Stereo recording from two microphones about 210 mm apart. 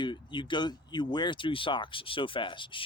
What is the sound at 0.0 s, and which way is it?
Speech, 20° left (ahead or behind).